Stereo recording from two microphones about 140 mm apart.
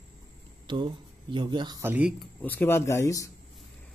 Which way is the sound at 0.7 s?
35° right (ahead or behind).